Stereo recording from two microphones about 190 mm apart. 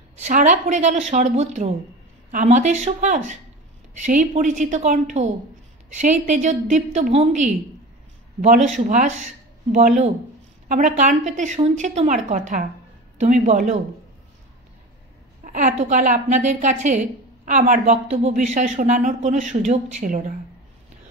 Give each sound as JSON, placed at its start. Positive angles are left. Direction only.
{"t": 0.1, "sound": "a woman's voice", "side_deg": -40}
{"t": 15.4, "sound": "a woman's voice", "side_deg": -40}